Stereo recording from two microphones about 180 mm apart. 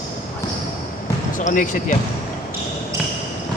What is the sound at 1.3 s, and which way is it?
Speech, 45° left (ahead or behind).